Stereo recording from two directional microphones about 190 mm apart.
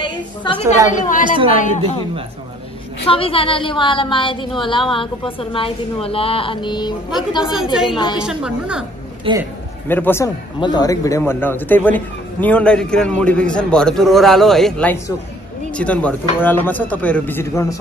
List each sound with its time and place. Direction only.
0.0 s a woman's voice: 25° left (ahead or behind)
0.8 s a woman's voice: 45° left (ahead or behind)
1.2 s a woman's voice: 25° right (ahead or behind)
1.6 s a woman's voice: 40° left (ahead or behind)
3.1 s a woman's voice: 30° left (ahead or behind)
8.2 s a woman's voice: 5° right (ahead or behind)
9.3 s a woman's voice: 25° right (ahead or behind)
9.8 s a man's voice: 10° left (ahead or behind)